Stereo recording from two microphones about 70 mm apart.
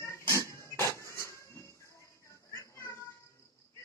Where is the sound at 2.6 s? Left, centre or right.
Left.